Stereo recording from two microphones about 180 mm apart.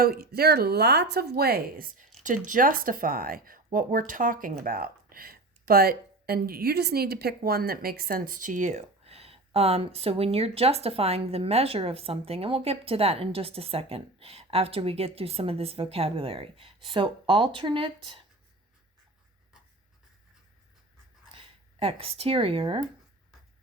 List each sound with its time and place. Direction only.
0.0 s speech: 60° right (ahead or behind); by 18.2 s 30° right (ahead or behind)
21.3 s speech: 30° right (ahead or behind)